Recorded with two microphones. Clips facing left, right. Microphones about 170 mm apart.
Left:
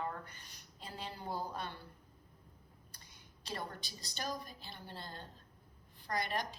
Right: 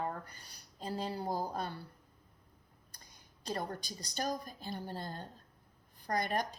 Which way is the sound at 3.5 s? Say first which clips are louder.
Right 5 dB; 40° right (ahead or behind).